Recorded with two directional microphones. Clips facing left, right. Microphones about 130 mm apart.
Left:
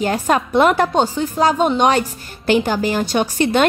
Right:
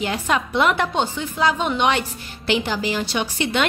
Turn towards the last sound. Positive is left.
turn(degrees=45)  # may be behind; listen again after turning